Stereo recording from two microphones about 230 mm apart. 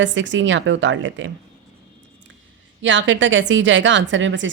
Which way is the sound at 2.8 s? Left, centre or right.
Right.